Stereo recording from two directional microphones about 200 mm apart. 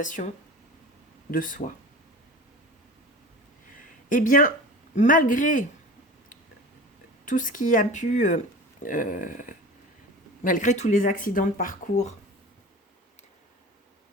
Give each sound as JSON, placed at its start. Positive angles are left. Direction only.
{"t": 0.0, "sound": "speech", "side_deg": 40}
{"t": 1.3, "sound": "speech", "side_deg": 40}
{"t": 4.1, "sound": "speech", "side_deg": 40}
{"t": 7.3, "sound": "speech", "side_deg": 40}
{"t": 8.8, "sound": "a sound", "side_deg": 40}
{"t": 10.4, "sound": "speech", "side_deg": 40}